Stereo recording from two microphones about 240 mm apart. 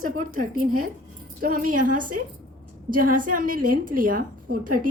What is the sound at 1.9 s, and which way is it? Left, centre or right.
A woman's voice, right.